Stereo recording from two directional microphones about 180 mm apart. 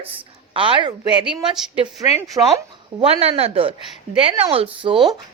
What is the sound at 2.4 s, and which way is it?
Speech, 25° right (ahead or behind).